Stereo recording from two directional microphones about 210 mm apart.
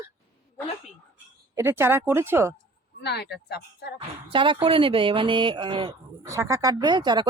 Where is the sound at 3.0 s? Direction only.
50° left (ahead or behind).